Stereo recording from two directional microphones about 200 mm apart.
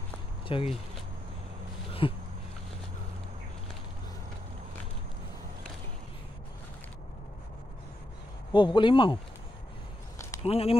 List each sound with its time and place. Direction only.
0.5 s speech: 25° left (ahead or behind)
1.9 s a sound: 25° left (ahead or behind)
8.5 s speech: 25° left (ahead or behind)
10.4 s speech: 30° left (ahead or behind)